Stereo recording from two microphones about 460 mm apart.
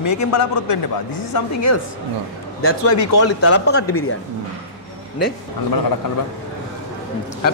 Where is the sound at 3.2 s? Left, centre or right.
Left.